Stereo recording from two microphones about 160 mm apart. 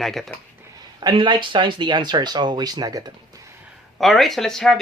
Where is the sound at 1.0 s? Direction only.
30° right (ahead or behind).